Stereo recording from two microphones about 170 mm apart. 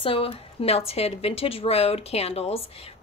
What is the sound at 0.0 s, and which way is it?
Speech, 30° left (ahead or behind).